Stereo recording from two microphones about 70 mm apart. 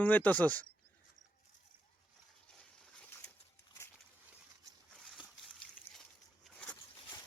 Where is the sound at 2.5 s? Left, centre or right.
Centre.